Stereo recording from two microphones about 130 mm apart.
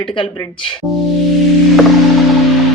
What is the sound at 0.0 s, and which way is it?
Speech, 40° left (ahead or behind).